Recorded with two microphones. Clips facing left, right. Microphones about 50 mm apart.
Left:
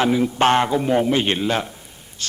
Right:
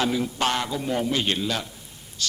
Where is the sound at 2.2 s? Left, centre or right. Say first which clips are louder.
Right 1 dB; left.